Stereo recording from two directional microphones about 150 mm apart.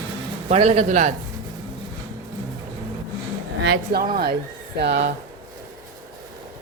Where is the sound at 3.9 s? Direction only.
80° right.